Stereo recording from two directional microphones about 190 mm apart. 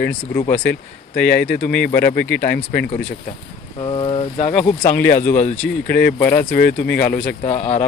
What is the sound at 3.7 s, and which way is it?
Speech, 25° left (ahead or behind).